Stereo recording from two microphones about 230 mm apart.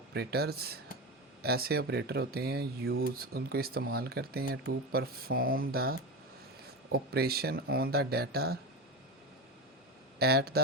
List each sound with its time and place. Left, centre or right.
0.1 s speech: right
10.2 s speech: right